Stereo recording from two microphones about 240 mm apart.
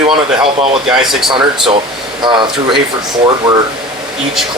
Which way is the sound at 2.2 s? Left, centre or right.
Centre.